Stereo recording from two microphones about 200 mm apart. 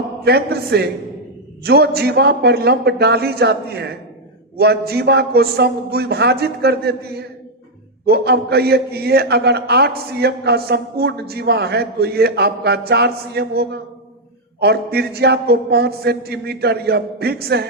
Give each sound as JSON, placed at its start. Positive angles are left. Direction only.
{"t": 0.3, "sound": "a man's voice", "side_deg": -55}